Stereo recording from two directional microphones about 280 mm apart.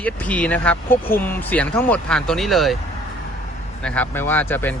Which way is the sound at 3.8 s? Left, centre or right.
Centre.